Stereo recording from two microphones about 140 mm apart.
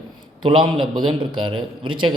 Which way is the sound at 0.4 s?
35° right (ahead or behind).